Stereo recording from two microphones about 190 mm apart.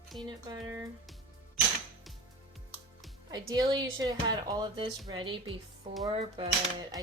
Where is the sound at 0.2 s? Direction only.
20° right (ahead or behind).